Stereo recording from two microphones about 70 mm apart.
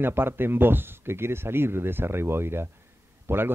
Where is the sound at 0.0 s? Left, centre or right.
Right.